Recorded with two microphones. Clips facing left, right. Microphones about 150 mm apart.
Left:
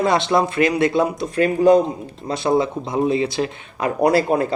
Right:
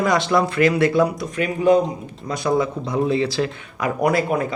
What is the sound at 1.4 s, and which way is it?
Speech, 35° left (ahead or behind).